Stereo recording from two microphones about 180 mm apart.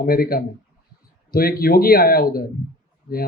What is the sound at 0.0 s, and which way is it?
Speech, 55° left (ahead or behind).